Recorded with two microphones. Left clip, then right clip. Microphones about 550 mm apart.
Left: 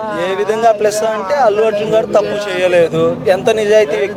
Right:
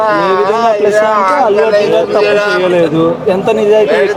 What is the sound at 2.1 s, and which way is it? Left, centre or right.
A man's voice, left.